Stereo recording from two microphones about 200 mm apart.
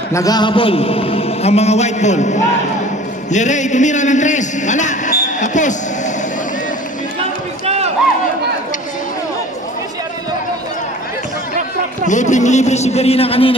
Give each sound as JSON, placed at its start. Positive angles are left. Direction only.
{"t": 0.1, "sound": "a man's voice", "side_deg": 20}
{"t": 5.1, "sound": "basketball bounce", "side_deg": 40}
{"t": 7.6, "sound": "run", "side_deg": -30}
{"t": 12.1, "sound": "a man's voice", "side_deg": 35}